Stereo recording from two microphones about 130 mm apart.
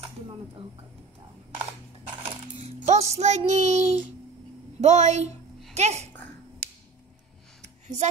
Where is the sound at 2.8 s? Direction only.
60° right (ahead or behind).